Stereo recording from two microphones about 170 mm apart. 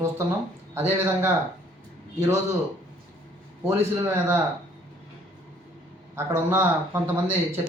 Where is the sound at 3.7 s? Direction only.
15° right (ahead or behind).